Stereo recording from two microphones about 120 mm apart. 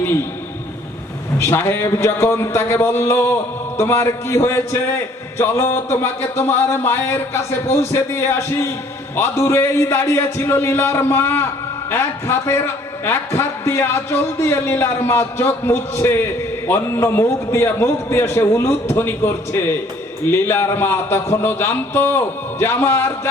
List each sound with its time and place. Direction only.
1.4 s speech: 20° left (ahead or behind)